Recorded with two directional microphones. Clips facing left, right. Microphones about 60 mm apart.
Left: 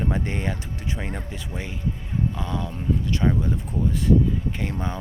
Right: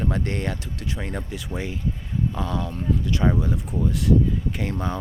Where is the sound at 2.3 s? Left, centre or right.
Centre.